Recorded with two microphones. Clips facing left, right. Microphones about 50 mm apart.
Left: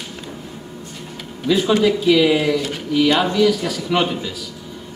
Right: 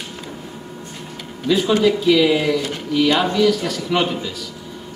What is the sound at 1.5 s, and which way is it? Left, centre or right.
A man's voice, centre.